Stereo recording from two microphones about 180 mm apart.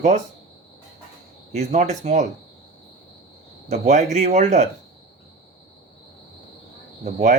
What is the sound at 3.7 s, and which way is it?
Speech, 40° right (ahead or behind).